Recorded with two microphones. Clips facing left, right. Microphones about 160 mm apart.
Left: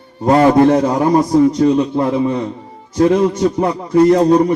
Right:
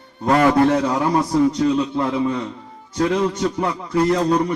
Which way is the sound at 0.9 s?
40° left (ahead or behind).